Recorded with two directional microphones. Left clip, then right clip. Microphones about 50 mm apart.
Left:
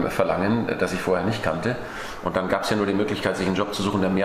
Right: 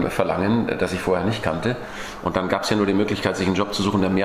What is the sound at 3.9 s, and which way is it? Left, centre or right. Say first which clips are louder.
Speech: right 1 dB; centre.